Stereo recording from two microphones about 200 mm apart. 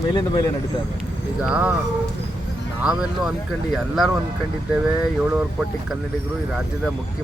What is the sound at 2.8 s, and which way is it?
Speech, 5° right (ahead or behind).